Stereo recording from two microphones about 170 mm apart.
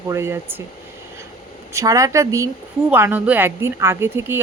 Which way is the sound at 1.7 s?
20° right (ahead or behind).